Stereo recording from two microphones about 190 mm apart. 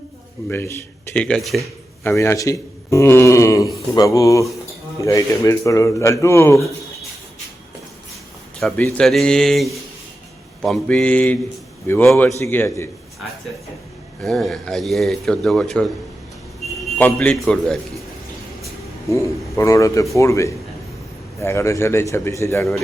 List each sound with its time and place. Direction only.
0.4 s a man's voice: 10° left (ahead or behind)
2.0 s a man's voice: 15° left (ahead or behind)
8.6 s a man's voice: centre (ahead or behind)
14.3 s a man's voice: centre (ahead or behind)
19.1 s a man's voice: 15° left (ahead or behind)